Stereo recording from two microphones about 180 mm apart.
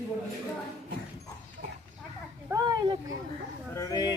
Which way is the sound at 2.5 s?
20° right (ahead or behind).